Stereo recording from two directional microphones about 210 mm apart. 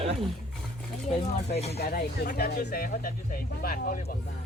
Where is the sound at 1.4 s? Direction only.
30° left (ahead or behind).